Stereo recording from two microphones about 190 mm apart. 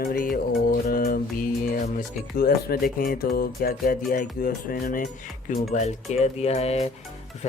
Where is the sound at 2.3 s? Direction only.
55° left (ahead or behind).